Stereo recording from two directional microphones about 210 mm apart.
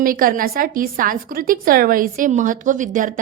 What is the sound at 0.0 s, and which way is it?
A woman's voice, 40° right (ahead or behind).